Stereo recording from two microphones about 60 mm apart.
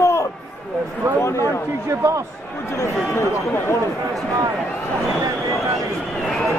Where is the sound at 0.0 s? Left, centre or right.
Left.